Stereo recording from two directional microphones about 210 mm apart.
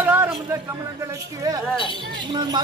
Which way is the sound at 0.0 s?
10° right (ahead or behind).